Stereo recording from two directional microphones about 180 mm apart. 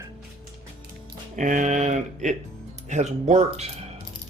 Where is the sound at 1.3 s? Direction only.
45° right (ahead or behind).